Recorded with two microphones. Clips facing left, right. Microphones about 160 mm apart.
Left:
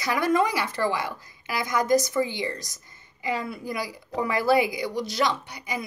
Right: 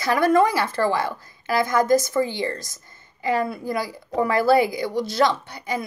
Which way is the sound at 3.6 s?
20° left (ahead or behind).